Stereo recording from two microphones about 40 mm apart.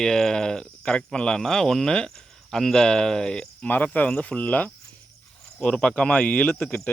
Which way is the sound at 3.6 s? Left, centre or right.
Left.